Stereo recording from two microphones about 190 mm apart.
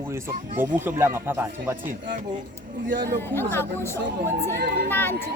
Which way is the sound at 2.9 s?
45° right (ahead or behind).